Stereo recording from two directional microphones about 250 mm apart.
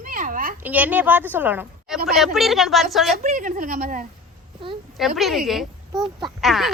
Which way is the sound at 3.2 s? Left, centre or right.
Right.